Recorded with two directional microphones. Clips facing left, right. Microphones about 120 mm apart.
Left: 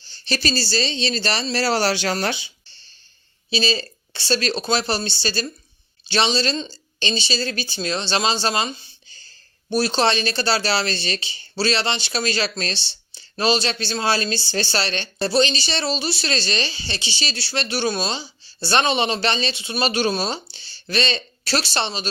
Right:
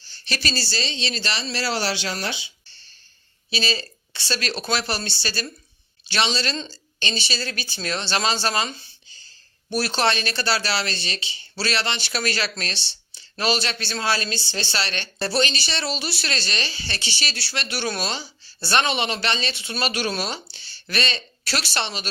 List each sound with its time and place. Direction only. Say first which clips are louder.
0.1 s speech: left 5 dB; 30° left (ahead or behind); by 2.5 s 50° left (ahead or behind)
3.5 s speech: left 4 dB; 30° left (ahead or behind)
11.5 s speech: left 4 dB; 25° left (ahead or behind)
19.5 s speech: left 4 dB; 20° left (ahead or behind)